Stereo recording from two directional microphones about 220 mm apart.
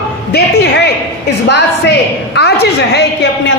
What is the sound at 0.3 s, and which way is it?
A woman's voice, 50° left (ahead or behind).